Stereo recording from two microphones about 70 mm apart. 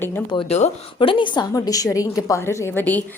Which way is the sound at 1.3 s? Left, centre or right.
Left.